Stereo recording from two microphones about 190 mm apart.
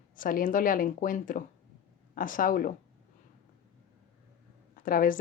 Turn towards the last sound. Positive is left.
turn(degrees=45)  # may be behind; listen again after turning